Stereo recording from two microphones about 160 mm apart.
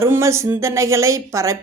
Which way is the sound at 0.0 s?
20° right (ahead or behind).